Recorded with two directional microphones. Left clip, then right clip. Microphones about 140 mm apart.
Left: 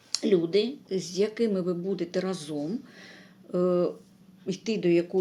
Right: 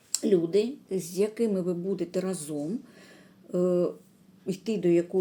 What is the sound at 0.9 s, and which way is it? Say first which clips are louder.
Speech: left 1 dB; 30° right (ahead or behind).